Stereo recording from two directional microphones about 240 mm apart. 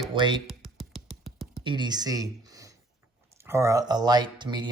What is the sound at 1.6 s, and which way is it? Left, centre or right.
Speech, centre.